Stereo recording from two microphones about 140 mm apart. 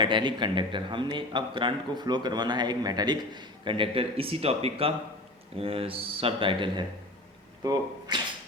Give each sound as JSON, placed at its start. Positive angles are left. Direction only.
{"t": 0.0, "sound": "a man's voice", "side_deg": -35}